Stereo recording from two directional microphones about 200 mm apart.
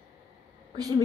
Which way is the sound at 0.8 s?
20° right (ahead or behind).